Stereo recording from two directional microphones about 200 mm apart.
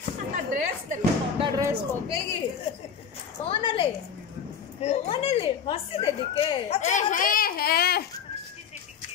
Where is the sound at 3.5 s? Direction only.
25° left (ahead or behind); by 8.0 s 50° left (ahead or behind).